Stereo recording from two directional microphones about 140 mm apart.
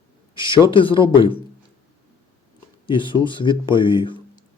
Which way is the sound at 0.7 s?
40° left (ahead or behind).